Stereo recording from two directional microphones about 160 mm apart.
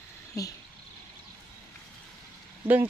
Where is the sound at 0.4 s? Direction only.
20° left (ahead or behind).